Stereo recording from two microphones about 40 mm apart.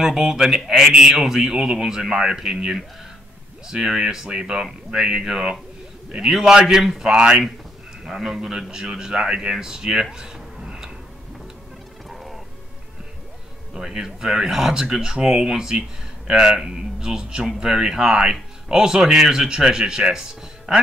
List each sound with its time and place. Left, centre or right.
0.0 s speech: centre
10.6 s tick-tock: centre
13.7 s speech: centre